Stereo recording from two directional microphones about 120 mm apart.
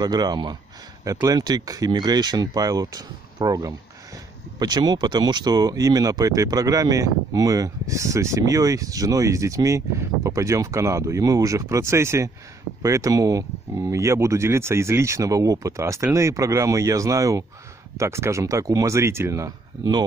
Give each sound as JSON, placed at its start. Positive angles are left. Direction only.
{"t": 0.0, "sound": "speech", "side_deg": -35}